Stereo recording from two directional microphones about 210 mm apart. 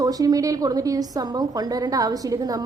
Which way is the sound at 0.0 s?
15° right (ahead or behind).